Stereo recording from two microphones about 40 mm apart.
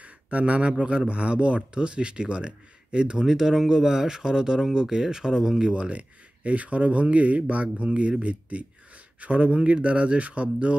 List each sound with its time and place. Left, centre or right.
0.0 s a sound: right
0.7 s speech: right
5.7 s speech: right